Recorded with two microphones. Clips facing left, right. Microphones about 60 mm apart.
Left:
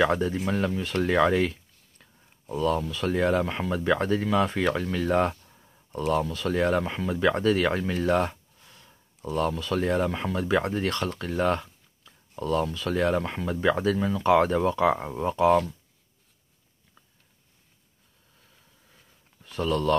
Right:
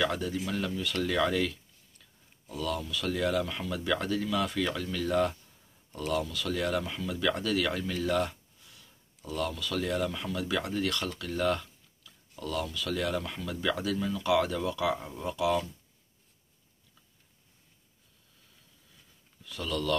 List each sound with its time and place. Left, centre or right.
0.0 s speech: left
4.6 s speech: left
19.4 s speech: left